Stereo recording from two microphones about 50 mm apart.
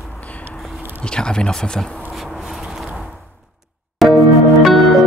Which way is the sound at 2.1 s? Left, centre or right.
Centre.